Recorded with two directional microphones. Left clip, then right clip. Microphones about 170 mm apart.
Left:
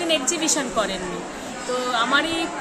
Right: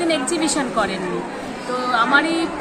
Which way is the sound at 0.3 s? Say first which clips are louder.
Right 3 dB; 55° left (ahead or behind).